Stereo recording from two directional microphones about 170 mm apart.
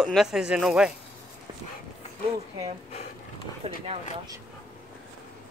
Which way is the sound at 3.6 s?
40° right (ahead or behind).